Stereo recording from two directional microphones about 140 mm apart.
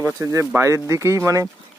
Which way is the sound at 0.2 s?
20° right (ahead or behind).